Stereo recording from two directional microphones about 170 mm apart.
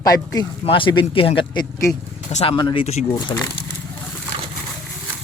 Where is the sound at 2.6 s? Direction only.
25° left (ahead or behind).